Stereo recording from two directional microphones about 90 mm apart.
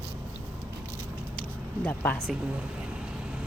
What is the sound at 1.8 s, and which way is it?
Speech, 20° left (ahead or behind).